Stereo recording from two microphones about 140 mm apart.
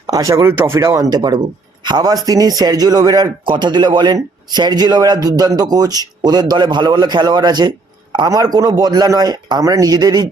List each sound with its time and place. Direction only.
0.1 s a man's voice: 25° right (ahead or behind)